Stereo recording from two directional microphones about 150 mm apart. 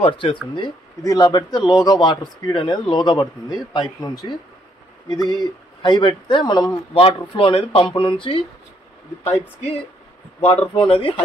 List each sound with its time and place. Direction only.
0.0 s a man's voice: 35° left (ahead or behind)
6.9 s speech: 35° left (ahead or behind)
10.4 s speech: 35° left (ahead or behind)